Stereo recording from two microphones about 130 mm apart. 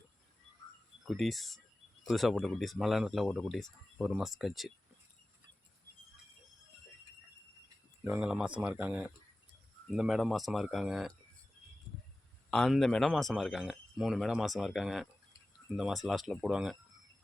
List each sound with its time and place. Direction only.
1.0 s speech: centre (ahead or behind)
8.0 s speech: 15° right (ahead or behind)
12.5 s speech: centre (ahead or behind)